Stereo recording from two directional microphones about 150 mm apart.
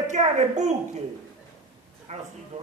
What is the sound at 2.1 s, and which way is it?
Speech, 50° right (ahead or behind).